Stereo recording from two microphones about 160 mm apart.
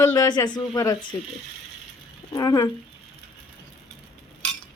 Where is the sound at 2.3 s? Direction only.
25° left (ahead or behind).